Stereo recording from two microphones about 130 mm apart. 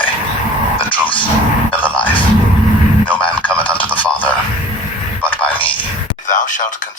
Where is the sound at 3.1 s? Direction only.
10° left (ahead or behind).